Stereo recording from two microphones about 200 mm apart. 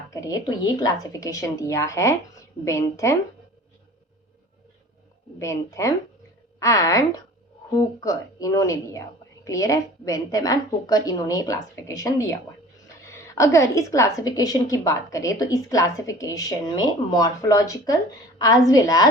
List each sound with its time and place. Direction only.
0.1 s a woman's voice: 15° left (ahead or behind)
5.4 s a woman's voice: 15° left (ahead or behind)